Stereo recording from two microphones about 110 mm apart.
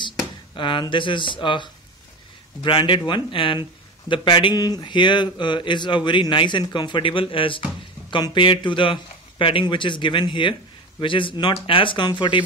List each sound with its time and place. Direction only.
0.6 s speech: 45° left (ahead or behind)